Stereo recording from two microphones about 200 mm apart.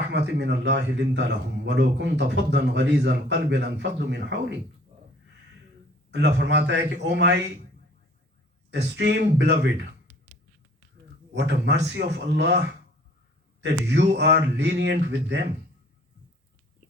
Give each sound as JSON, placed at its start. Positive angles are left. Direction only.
{"t": 0.1, "sound": "a man's voice", "side_deg": -60}
{"t": 6.1, "sound": "a man's voice", "side_deg": -60}
{"t": 8.7, "sound": "a man's voice", "side_deg": -60}
{"t": 11.3, "sound": "a man's voice", "side_deg": -60}
{"t": 13.6, "sound": "a man's voice", "side_deg": -60}